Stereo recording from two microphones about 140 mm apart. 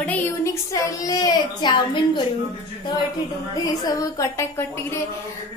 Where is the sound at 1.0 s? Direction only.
25° left (ahead or behind).